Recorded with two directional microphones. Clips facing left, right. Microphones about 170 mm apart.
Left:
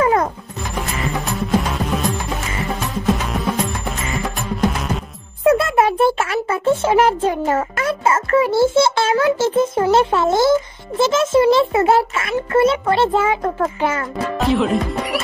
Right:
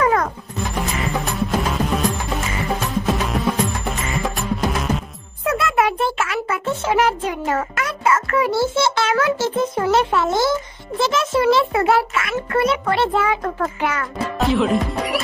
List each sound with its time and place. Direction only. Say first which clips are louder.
0.0 s music: left 2 dB; 25° left (ahead or behind)
0.8 s music: even; centre (ahead or behind)
3.9 s music: even; centre (ahead or behind)
5.4 s music: left 5 dB; 30° left (ahead or behind)
6.1 s a child's voice: left 3 dB; 30° left (ahead or behind)
14.4 s speech: even; centre (ahead or behind)